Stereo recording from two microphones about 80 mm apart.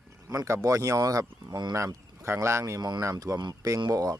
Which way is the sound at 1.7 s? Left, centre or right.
Right.